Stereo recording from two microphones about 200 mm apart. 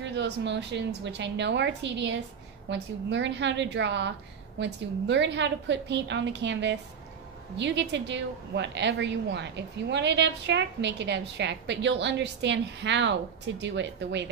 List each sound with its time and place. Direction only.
0.0 s a woman's voice: 60° right (ahead or behind)